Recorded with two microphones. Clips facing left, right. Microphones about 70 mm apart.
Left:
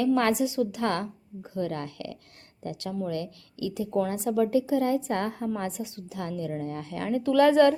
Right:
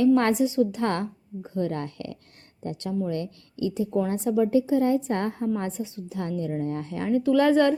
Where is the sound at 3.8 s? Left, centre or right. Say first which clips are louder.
Left 2 dB; centre; by 7.1 s right.